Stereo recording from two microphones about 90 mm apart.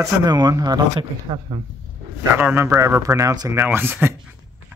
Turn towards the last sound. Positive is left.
turn(degrees=-25)  # may be behind; listen again after turning